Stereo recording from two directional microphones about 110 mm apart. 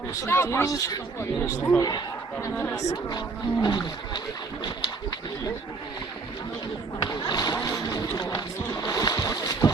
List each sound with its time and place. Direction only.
0.2 s a man's voice: 25° left (ahead or behind)
2.9 s speech: 40° left (ahead or behind)
7.0 s speech: 40° left (ahead or behind)